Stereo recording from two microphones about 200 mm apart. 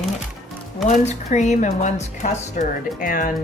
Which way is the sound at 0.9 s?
35° left (ahead or behind).